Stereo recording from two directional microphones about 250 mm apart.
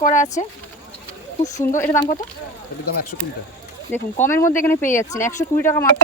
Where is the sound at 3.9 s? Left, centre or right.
Centre.